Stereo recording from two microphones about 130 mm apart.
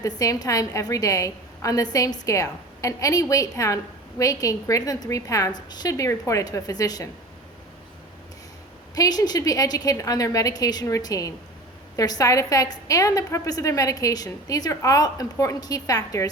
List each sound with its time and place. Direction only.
0.0 s a woman's voice: 25° left (ahead or behind)
9.0 s a woman's voice: 30° left (ahead or behind)